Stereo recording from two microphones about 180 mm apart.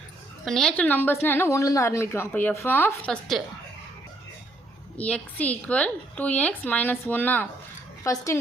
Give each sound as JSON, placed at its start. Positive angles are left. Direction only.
{"t": 0.4, "sound": "a woman's voice", "side_deg": 0}
{"t": 4.9, "sound": "a woman's voice", "side_deg": 5}